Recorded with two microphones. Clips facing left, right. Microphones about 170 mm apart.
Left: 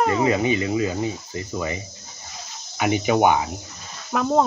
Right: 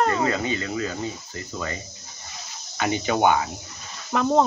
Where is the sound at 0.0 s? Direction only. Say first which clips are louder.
Left 3 dB; 15° left (ahead or behind).